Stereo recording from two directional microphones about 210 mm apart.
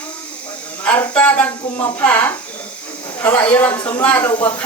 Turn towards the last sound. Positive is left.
turn(degrees=10)  # may be behind; listen again after turning